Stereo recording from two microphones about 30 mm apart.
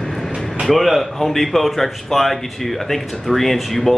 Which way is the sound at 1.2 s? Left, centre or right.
Centre.